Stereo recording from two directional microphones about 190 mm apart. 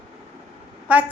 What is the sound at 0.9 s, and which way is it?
Speech, 10° right (ahead or behind).